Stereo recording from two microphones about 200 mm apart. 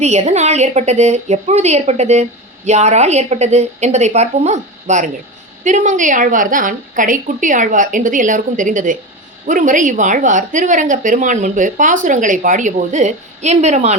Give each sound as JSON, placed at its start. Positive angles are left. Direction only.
{"t": 0.0, "sound": "a woman's voice", "side_deg": -35}